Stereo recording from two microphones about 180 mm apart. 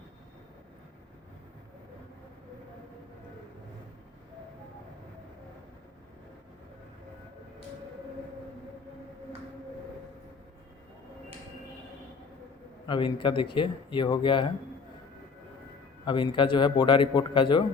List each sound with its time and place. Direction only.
12.9 s a man's voice: 25° left (ahead or behind)
16.0 s a man's voice: 25° left (ahead or behind)